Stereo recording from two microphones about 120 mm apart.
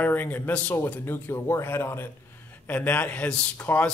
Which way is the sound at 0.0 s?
15° left (ahead or behind).